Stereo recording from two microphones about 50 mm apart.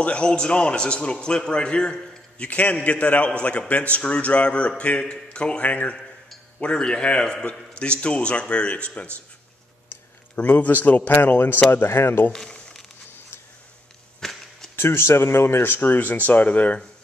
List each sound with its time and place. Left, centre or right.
0.0 s a man's voice: left
5.6 s speech: left
6.6 s a man's voice: centre
9.8 s a sound: left
11.2 s speech: left
12.4 s a sound: left
14.2 s a sound: centre
14.8 s speech: left
15.7 s speech: left